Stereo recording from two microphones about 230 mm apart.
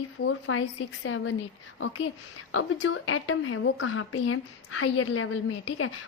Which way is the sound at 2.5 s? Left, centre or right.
Left.